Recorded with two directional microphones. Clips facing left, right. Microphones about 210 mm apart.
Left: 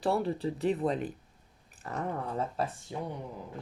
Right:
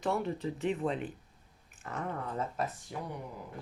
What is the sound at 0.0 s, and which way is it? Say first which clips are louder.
Speech: left 3 dB; 35° left (ahead or behind).